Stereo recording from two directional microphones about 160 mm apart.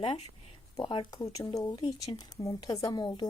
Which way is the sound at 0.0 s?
35° left (ahead or behind).